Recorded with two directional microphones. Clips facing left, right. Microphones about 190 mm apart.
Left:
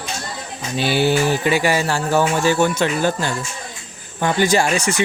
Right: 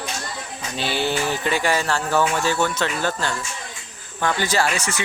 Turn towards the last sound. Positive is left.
turn(degrees=15)  # may be behind; listen again after turning